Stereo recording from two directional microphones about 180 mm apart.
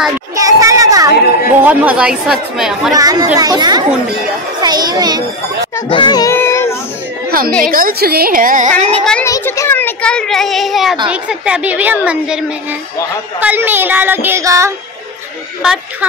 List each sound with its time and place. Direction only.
0.4 s a child's voice: 20° right (ahead or behind)
1.6 s a child's voice: 10° right (ahead or behind)
2.9 s a child's voice: 20° right (ahead or behind)
5.9 s child singing: 25° left (ahead or behind)
7.2 s chatter: 55° right (ahead or behind)
7.6 s a woman's voice: 50° right (ahead or behind)
9.2 s a child's voice: 15° left (ahead or behind); by 12.4 s 5° right (ahead or behind)
13.4 s a woman's voice: 10° right (ahead or behind)
15.6 s a child's voice: 5° right (ahead or behind)